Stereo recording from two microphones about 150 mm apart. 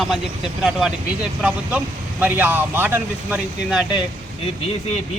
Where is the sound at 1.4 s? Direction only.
5° right (ahead or behind).